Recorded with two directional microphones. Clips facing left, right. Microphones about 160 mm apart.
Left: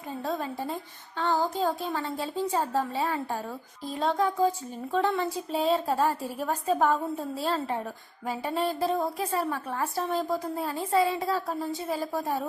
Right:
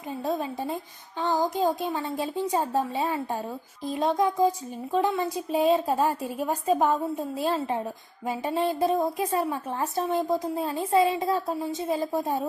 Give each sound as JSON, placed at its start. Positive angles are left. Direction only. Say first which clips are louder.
{"t": 0.3, "sound": "a woman's voice", "louder": "right 3 dB", "side_deg": -15}